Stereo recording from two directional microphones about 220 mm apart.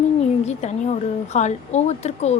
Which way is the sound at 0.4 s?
30° left (ahead or behind).